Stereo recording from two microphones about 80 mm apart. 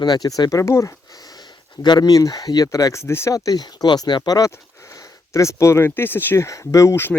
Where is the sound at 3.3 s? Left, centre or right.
Left.